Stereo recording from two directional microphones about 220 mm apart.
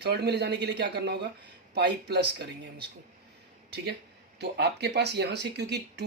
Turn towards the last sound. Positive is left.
turn(degrees=-50)  # may be behind; listen again after turning